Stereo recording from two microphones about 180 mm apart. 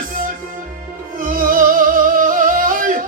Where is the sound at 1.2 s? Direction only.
50° right (ahead or behind).